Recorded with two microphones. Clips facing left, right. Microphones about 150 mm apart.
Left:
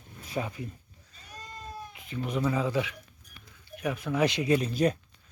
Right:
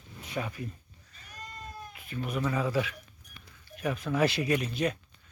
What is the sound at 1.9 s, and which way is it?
Speech, 20° left (ahead or behind).